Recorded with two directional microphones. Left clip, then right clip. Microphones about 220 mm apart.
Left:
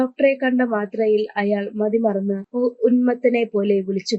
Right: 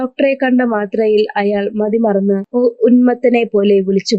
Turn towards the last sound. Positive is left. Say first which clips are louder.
# right 8 dB
turn(degrees=-40)  # may be behind; listen again after turning